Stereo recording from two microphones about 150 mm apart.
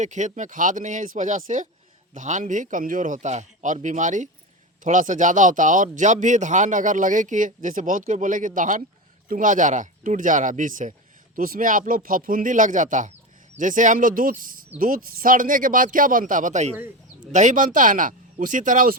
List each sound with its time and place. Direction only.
0.0 s a man's voice: 55° right (ahead or behind)
11.3 s a man's voice: 70° right (ahead or behind)